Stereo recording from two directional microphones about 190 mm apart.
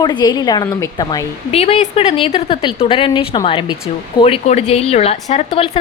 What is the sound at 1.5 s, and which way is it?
A woman's voice, 30° left (ahead or behind).